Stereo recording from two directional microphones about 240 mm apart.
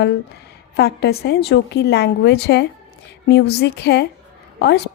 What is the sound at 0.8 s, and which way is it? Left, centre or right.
A woman's voice, left.